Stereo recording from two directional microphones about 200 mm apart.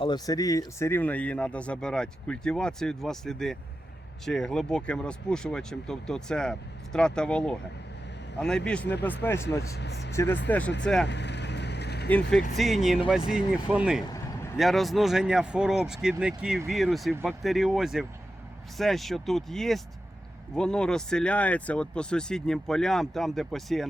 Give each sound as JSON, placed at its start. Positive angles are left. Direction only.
{"t": 0.0, "sound": "a man's voice", "side_deg": 20}
{"t": 9.7, "sound": "speech", "side_deg": 55}
{"t": 10.5, "sound": "a man's voice", "side_deg": 10}
{"t": 11.0, "sound": "vehicle", "side_deg": 60}
{"t": 12.0, "sound": "a man's voice", "side_deg": 5}